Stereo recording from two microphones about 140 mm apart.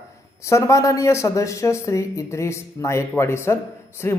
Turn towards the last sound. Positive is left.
turn(degrees=20)  # may be behind; listen again after turning